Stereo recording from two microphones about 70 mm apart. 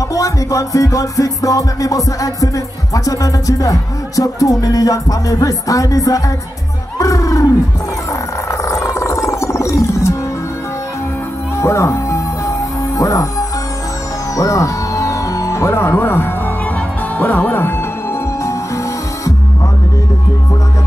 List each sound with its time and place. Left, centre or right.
0.1 s music: left
7.0 s crowd: left
8.5 s music: left
11.5 s music: left
14.3 s music: left
17.2 s speech: left